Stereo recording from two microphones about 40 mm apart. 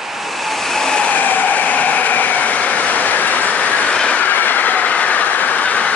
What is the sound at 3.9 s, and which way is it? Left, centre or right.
Train, left.